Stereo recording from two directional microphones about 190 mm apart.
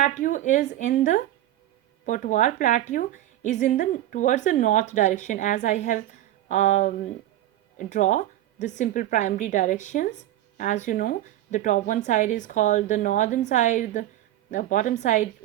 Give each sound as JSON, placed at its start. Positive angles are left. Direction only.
{"t": 0.0, "sound": "a woman's voice", "side_deg": 40}